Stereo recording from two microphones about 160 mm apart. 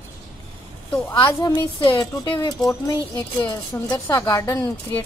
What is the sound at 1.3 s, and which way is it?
A woman's voice, 20° left (ahead or behind).